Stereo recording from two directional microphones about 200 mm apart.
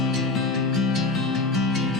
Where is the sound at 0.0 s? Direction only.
Centre (ahead or behind).